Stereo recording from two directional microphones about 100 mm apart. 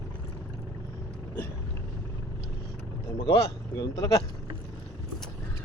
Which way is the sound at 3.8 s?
35° left (ahead or behind).